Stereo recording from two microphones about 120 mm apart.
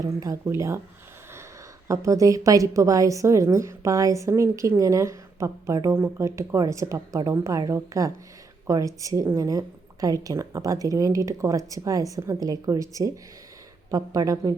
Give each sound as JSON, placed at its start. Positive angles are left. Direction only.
{"t": 0.0, "sound": "a woman's voice", "side_deg": -30}
{"t": 1.9, "sound": "a woman's voice", "side_deg": -25}